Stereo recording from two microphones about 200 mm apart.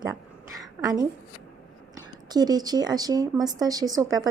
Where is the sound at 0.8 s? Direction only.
20° right (ahead or behind).